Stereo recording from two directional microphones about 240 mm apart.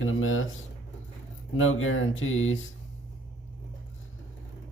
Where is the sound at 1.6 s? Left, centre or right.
Left.